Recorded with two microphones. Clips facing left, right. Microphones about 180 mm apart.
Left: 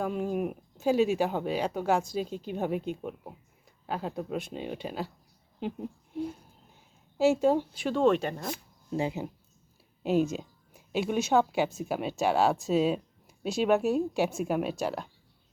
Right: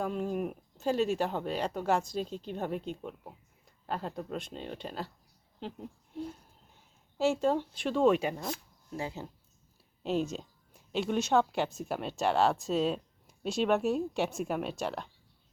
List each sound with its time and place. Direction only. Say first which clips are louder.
0.0 s a woman's voice: left 3 dB; 5° left (ahead or behind)
7.2 s a woman's voice: left 4 dB; 5° left (ahead or behind)
8.9 s a woman's voice: left 7 dB; 20° left (ahead or behind)